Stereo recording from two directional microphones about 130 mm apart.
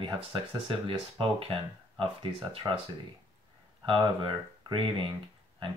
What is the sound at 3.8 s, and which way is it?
Speech, 40° right (ahead or behind).